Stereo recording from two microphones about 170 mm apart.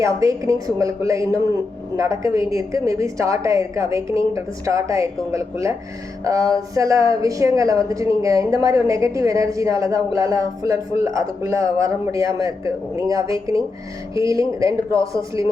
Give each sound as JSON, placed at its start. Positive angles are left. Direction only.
{"t": 0.0, "sound": "a woman's voice", "side_deg": -20}